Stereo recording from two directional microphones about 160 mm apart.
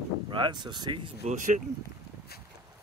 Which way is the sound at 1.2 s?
50° right (ahead or behind).